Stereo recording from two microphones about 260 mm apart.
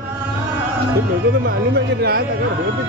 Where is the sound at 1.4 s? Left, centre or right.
Right.